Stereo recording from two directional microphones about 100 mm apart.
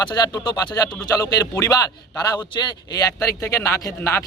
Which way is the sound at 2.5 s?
45° left (ahead or behind).